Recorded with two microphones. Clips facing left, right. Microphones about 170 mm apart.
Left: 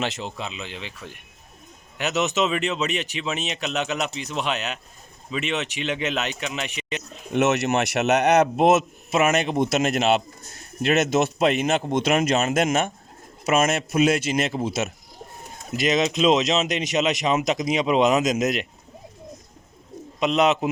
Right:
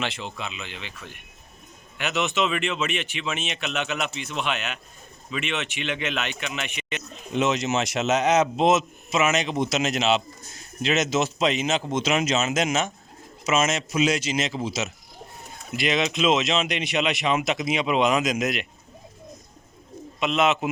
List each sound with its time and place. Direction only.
0.0 s speech: 40° left (ahead or behind)
7.3 s a man's voice: 65° left (ahead or behind)
15.7 s speech: 40° left (ahead or behind)
20.1 s speech: 40° left (ahead or behind)